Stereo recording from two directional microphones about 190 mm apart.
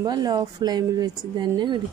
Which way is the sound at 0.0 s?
20° right (ahead or behind).